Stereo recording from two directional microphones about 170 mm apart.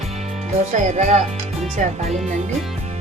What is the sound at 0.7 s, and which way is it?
Speech, 45° right (ahead or behind).